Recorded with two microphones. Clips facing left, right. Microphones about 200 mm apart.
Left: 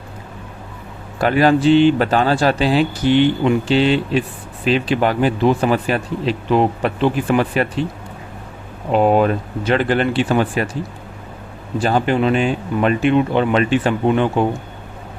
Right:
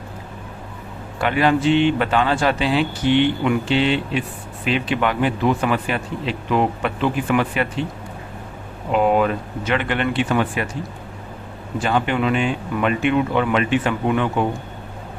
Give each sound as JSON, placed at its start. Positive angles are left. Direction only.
{"t": 1.2, "sound": "speech", "side_deg": 40}
{"t": 8.9, "sound": "speech", "side_deg": 35}
{"t": 11.8, "sound": "speech", "side_deg": 35}